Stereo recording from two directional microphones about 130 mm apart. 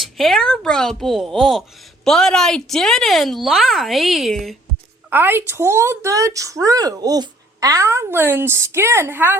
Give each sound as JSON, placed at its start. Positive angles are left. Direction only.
{"t": 0.0, "sound": "speech", "side_deg": 0}
{"t": 5.0, "sound": "a woman's voice", "side_deg": -15}